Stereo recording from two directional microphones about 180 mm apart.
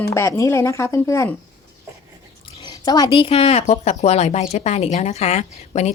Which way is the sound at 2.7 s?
20° left (ahead or behind).